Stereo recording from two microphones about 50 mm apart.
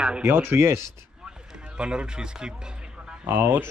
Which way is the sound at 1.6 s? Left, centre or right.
Centre.